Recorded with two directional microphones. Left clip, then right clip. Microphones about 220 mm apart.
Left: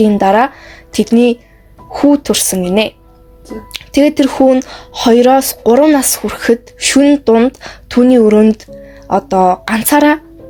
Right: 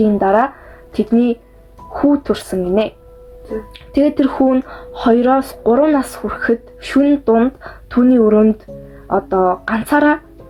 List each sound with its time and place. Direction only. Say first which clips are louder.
0.0 s speech: left 4 dB; 30° left (ahead or behind)